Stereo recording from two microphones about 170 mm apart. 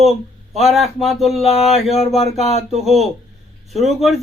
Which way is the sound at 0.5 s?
Centre (ahead or behind).